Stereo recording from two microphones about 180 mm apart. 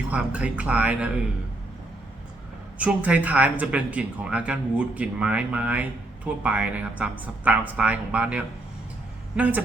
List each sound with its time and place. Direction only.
0.1 s speech: 5° right (ahead or behind)
2.7 s speech: 5° right (ahead or behind)